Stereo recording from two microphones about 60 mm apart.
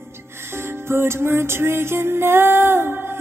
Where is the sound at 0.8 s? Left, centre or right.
Right.